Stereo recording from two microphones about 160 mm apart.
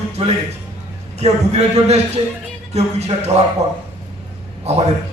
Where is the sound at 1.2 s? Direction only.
45° right (ahead or behind).